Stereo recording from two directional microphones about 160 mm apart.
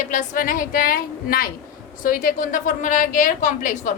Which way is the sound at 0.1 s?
55° left (ahead or behind).